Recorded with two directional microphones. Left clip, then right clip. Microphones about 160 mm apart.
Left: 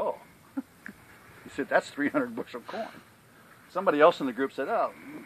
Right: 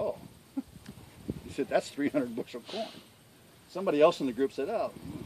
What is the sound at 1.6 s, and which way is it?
Speech, 30° right (ahead or behind).